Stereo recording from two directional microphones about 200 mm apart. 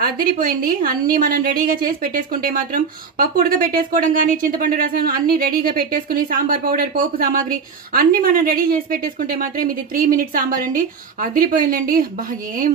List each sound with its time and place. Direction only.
0.0 s a woman's voice: 45° right (ahead or behind)